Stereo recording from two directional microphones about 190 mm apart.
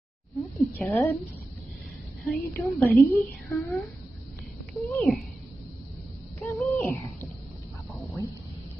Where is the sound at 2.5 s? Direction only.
10° left (ahead or behind).